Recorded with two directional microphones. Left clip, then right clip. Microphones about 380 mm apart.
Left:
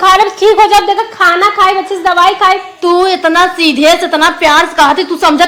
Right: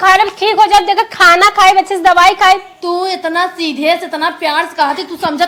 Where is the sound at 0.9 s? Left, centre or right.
Right.